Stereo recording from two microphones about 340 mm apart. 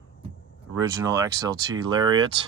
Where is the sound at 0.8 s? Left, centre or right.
Centre.